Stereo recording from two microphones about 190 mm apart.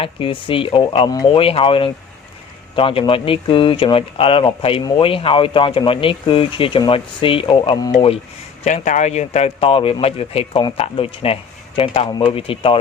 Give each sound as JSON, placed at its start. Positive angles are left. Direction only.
{"t": 0.0, "sound": "speech", "side_deg": 25}
{"t": 8.6, "sound": "speech", "side_deg": 40}